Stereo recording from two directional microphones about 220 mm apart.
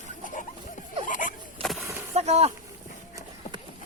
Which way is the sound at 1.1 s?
35° left (ahead or behind).